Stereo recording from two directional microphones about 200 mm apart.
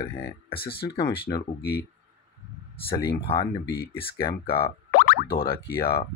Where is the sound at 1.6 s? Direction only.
50° left (ahead or behind).